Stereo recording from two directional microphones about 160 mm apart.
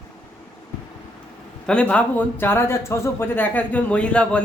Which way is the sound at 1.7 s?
5° left (ahead or behind).